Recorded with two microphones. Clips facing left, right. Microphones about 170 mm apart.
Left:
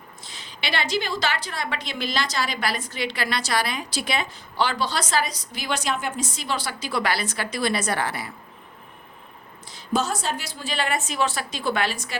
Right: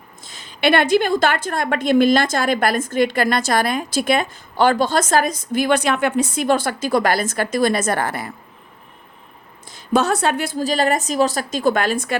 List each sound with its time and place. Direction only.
0.2 s a woman's voice: 45° right (ahead or behind)
9.6 s a woman's voice: 55° right (ahead or behind)